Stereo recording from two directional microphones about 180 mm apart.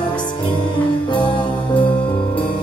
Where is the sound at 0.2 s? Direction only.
25° left (ahead or behind).